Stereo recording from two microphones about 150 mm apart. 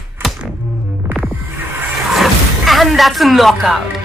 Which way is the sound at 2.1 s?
Centre (ahead or behind).